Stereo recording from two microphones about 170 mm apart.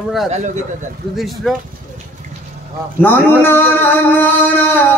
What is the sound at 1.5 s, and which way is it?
Speech, centre (ahead or behind).